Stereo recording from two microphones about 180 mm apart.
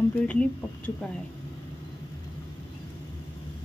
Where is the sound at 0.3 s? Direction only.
5° left (ahead or behind).